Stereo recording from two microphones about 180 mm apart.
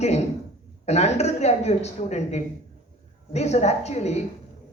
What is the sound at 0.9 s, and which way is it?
A woman's voice, 40° left (ahead or behind).